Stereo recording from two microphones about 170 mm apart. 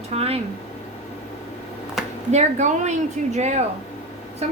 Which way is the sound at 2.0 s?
Centre (ahead or behind).